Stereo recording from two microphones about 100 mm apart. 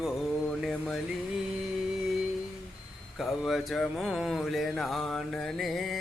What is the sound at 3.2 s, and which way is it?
Mantra, centre (ahead or behind).